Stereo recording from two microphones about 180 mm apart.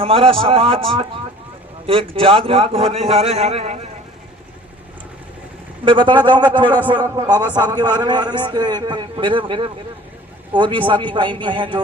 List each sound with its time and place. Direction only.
0.0 s a man's voice: 30° right (ahead or behind)
5.8 s a man's voice: 25° right (ahead or behind)